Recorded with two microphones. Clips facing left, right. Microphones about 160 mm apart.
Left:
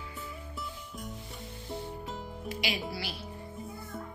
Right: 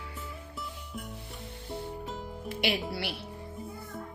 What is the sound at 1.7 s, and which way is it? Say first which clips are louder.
Music: right 1 dB; centre (ahead or behind).